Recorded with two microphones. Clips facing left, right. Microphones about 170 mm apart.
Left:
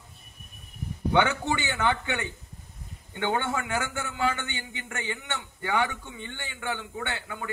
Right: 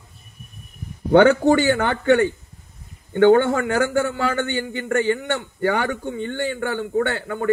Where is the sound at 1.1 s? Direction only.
45° right (ahead or behind).